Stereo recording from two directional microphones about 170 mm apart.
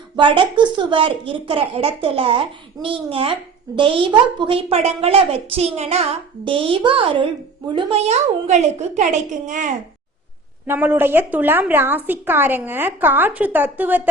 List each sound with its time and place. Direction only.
0.2 s a woman's voice: 30° right (ahead or behind); by 9.7 s 50° right (ahead or behind)
10.7 s a woman's voice: 10° right (ahead or behind)